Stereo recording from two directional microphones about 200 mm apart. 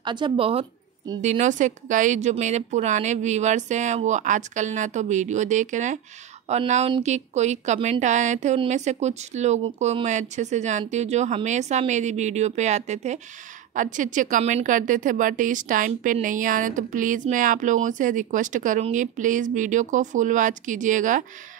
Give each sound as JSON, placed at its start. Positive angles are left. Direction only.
{"t": 0.0, "sound": "a woman's voice", "side_deg": -25}